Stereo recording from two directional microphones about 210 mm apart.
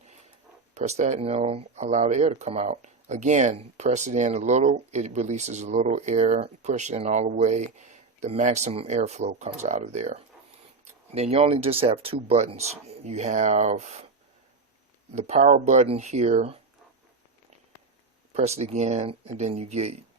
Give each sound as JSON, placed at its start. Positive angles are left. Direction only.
{"t": 0.7, "sound": "speech", "side_deg": -30}
{"t": 15.1, "sound": "speech", "side_deg": -30}
{"t": 18.3, "sound": "speech", "side_deg": -30}